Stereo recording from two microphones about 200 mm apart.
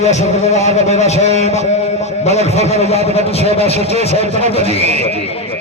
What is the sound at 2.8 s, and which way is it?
Speech, 30° right (ahead or behind).